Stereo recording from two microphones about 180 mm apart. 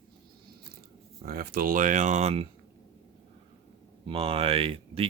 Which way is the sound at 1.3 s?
55° right (ahead or behind).